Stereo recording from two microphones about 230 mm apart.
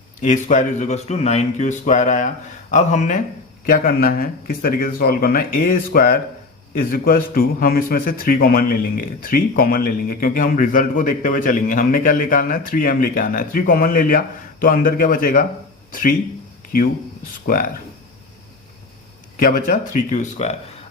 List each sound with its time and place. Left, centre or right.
0.2 s a man's voice: left
19.4 s a man's voice: left